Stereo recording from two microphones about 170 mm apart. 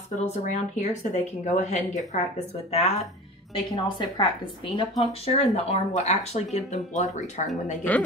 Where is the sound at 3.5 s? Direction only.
25° left (ahead or behind); by 7.4 s 45° left (ahead or behind).